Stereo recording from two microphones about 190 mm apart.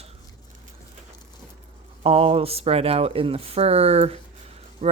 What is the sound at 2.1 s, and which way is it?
Speech, 30° right (ahead or behind).